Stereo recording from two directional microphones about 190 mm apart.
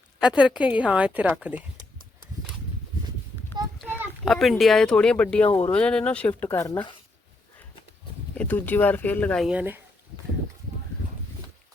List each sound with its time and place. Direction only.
0.2 s a woman's voice: 5° right (ahead or behind)
4.3 s speech: centre (ahead or behind)
5.5 s speech: 30° left (ahead or behind)
5.7 s speech: 5° left (ahead or behind)
8.4 s speech: 10° left (ahead or behind); by 9.8 s 10° right (ahead or behind)